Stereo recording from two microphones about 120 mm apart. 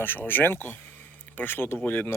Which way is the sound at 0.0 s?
15° left (ahead or behind).